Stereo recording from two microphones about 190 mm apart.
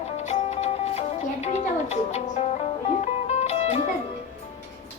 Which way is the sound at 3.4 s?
35° left (ahead or behind).